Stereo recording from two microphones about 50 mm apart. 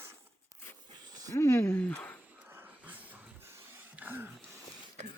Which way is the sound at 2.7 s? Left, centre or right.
Right.